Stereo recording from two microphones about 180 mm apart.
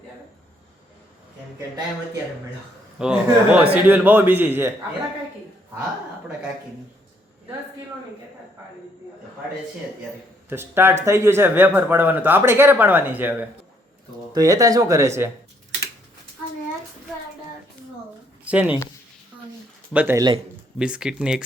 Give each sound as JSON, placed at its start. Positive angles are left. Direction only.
{"t": 3.0, "sound": "speech", "side_deg": -5}
{"t": 10.5, "sound": "speech", "side_deg": -15}
{"t": 14.3, "sound": "speech", "side_deg": -20}
{"t": 18.4, "sound": "speech", "side_deg": -5}
{"t": 19.9, "sound": "speech", "side_deg": -10}
{"t": 20.1, "sound": "speech", "side_deg": -25}
{"t": 20.7, "sound": "speech", "side_deg": -5}